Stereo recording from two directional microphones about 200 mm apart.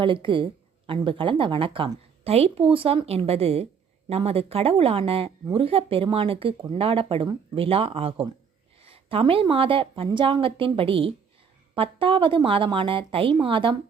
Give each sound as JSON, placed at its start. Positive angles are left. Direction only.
{"t": 0.0, "sound": "speech", "side_deg": -25}